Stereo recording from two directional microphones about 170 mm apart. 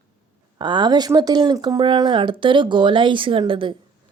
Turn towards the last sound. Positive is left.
turn(degrees=-30)  # may be behind; listen again after turning